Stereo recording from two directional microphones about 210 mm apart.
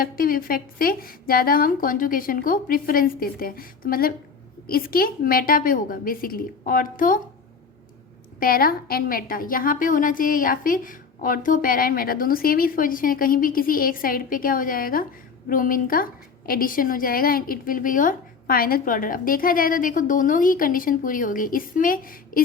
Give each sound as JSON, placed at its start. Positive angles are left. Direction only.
{"t": 0.0, "sound": "a woman's voice", "side_deg": 45}
{"t": 8.4, "sound": "a woman's voice", "side_deg": 45}